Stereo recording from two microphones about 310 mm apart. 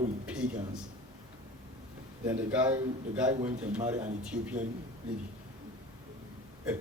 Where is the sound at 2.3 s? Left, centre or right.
Centre.